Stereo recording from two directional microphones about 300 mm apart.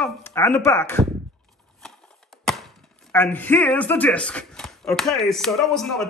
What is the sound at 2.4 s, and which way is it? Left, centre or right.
Speech, centre.